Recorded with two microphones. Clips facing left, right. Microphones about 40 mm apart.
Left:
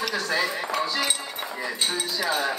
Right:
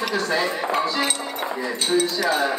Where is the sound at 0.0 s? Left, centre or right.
Centre.